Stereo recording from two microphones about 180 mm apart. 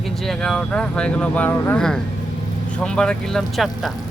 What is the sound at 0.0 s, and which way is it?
Speech, centre (ahead or behind).